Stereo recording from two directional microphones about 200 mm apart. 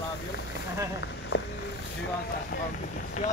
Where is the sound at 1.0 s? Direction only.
60° left (ahead or behind).